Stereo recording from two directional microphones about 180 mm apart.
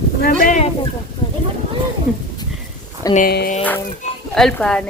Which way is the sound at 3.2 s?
55° left (ahead or behind).